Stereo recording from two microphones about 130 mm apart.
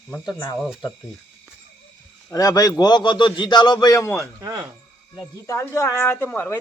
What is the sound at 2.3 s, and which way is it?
A man's voice, 25° left (ahead or behind).